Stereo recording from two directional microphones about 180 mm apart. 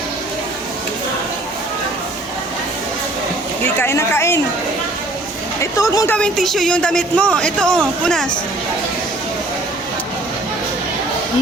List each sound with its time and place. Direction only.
3.8 s speech: 15° left (ahead or behind)
5.5 s speech: 20° left (ahead or behind)
6.1 s speech: 5° left (ahead or behind)